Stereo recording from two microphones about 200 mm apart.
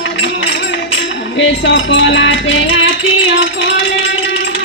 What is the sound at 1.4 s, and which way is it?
Music, 65° left (ahead or behind).